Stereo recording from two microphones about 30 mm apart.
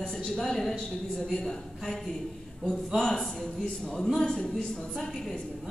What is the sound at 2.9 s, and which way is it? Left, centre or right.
A man's voice, centre.